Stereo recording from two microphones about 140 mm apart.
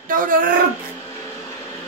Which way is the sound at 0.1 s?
80° right.